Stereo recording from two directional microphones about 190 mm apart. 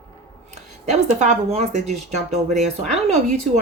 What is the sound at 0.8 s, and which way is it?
Speech, 35° right (ahead or behind).